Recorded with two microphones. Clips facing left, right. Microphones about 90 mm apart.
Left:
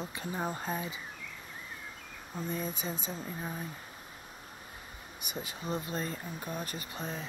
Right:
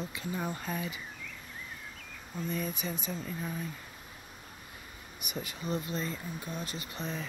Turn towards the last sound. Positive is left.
turn(degrees=40)  # may be behind; listen again after turning